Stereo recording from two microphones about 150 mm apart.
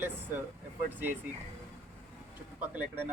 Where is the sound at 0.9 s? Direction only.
10° right (ahead or behind).